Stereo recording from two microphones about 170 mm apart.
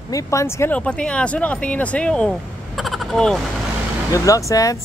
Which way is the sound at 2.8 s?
Centre (ahead or behind).